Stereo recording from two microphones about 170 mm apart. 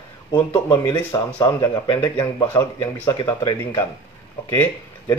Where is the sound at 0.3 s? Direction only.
15° left (ahead or behind).